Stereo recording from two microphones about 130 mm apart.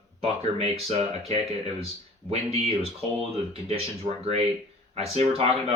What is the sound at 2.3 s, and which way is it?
Speech, 50° right (ahead or behind).